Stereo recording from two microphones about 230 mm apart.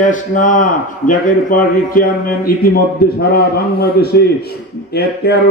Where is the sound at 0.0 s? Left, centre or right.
Left.